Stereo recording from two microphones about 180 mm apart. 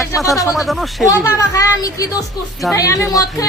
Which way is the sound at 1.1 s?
20° left (ahead or behind).